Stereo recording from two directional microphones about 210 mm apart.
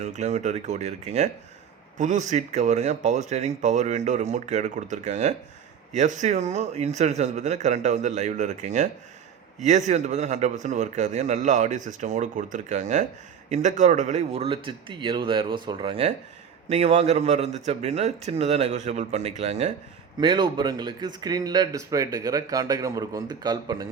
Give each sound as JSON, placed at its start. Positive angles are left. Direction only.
{"t": 0.0, "sound": "a man's voice", "side_deg": -35}